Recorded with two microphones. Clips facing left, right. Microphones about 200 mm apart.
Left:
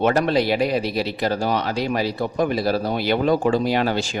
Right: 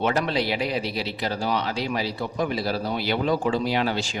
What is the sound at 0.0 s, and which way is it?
Speech, 50° left (ahead or behind).